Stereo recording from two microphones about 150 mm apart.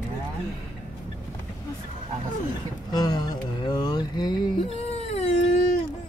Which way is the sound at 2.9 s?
25° left (ahead or behind).